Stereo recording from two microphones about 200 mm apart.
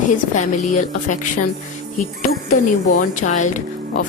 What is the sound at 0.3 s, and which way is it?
Speech, 40° left (ahead or behind).